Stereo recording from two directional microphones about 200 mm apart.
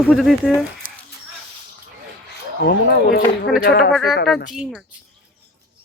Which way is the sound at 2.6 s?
55° left (ahead or behind).